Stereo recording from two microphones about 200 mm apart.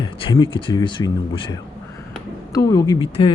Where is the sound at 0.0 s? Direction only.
20° left (ahead or behind).